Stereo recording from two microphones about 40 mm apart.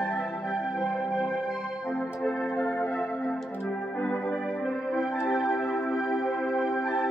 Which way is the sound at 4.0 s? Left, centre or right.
Left.